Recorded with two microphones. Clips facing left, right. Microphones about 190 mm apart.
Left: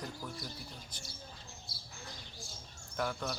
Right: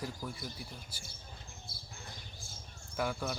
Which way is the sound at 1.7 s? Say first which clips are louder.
Right 1 dB; 50° right (ahead or behind).